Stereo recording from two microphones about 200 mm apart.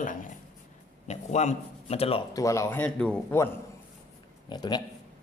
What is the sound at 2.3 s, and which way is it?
Speech, 15° left (ahead or behind).